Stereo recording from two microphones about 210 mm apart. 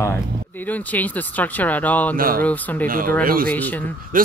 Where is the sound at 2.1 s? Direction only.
45° right (ahead or behind).